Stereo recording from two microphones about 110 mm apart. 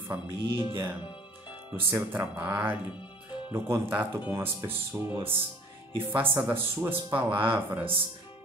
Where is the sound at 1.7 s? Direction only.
20° right (ahead or behind).